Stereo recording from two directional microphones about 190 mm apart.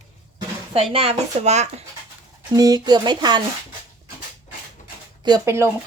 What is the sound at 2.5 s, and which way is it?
Speech, 20° right (ahead or behind).